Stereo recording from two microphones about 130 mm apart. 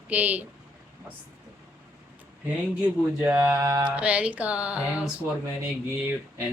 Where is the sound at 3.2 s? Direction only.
15° right (ahead or behind).